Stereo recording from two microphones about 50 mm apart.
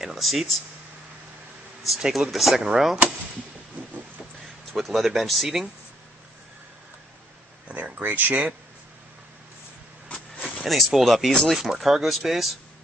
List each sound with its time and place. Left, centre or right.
0.0 s speech: centre
1.9 s speech: centre
4.7 s speech: centre
7.6 s speech: right
10.6 s speech: centre